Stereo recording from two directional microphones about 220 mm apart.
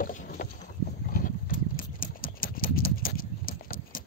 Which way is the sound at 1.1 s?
40° left (ahead or behind).